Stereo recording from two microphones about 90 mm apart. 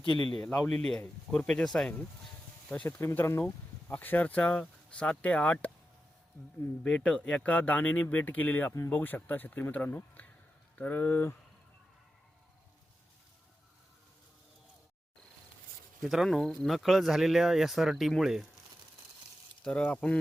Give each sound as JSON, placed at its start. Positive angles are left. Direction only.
{"t": 0.0, "sound": "speech", "side_deg": 60}
{"t": 0.3, "sound": "speech", "side_deg": 15}
{"t": 3.0, "sound": "speech", "side_deg": 30}
{"t": 3.4, "sound": "speech", "side_deg": 20}
{"t": 6.8, "sound": "speech", "side_deg": 10}
{"t": 16.0, "sound": "speech", "side_deg": -5}
{"t": 19.6, "sound": "speech", "side_deg": 15}